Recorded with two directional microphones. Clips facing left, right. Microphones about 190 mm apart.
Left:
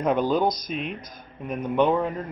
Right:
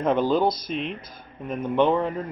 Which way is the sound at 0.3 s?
Centre (ahead or behind).